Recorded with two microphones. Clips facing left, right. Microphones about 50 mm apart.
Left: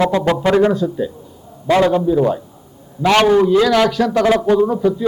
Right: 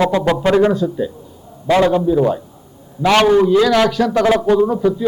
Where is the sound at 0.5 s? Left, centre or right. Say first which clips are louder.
Even; centre.